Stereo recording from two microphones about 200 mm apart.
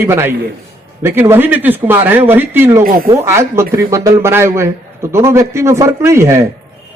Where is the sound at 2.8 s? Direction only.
45° right (ahead or behind).